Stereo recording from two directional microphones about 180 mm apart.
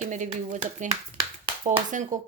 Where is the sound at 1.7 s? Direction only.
45° right (ahead or behind).